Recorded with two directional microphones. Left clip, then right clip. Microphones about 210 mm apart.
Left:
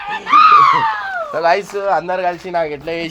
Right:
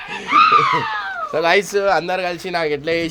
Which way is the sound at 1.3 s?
45° right (ahead or behind).